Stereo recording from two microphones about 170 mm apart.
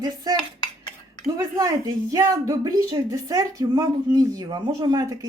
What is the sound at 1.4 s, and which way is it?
Speech, 20° right (ahead or behind).